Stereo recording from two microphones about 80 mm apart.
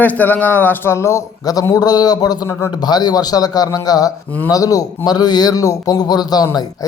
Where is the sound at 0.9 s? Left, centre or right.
Left.